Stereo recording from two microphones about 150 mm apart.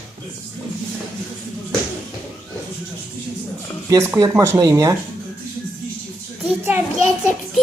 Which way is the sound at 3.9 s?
20° right (ahead or behind).